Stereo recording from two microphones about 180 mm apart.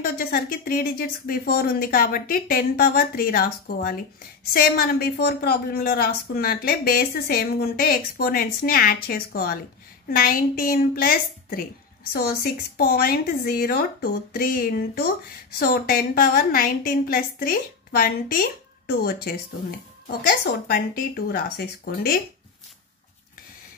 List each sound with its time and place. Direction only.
0.0 s a woman's voice: 55° left (ahead or behind)